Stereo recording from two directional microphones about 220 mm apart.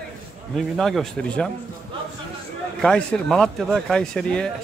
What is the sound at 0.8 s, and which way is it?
Speech, centre (ahead or behind).